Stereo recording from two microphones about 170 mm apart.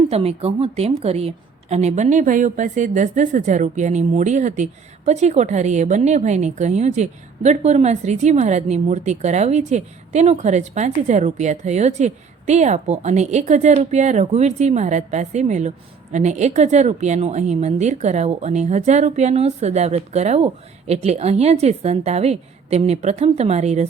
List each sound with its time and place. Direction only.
0.1 s a woman's voice: 35° right (ahead or behind)